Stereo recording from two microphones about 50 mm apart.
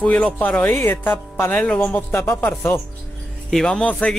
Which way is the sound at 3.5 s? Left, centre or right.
Centre.